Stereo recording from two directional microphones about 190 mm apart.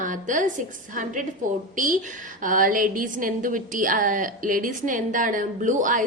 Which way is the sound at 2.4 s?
45° right (ahead or behind).